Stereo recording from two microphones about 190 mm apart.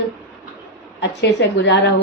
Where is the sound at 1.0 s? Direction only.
65° left (ahead or behind).